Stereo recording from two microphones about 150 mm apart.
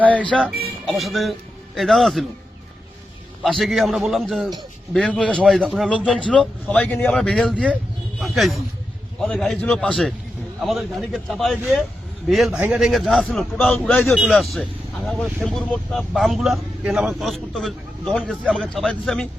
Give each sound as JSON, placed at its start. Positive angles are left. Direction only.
{"t": 0.0, "sound": "a man's voice", "side_deg": 10}
{"t": 3.4, "sound": "a man's voice", "side_deg": 0}